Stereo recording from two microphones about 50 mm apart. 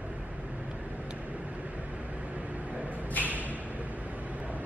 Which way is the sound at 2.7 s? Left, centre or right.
Right.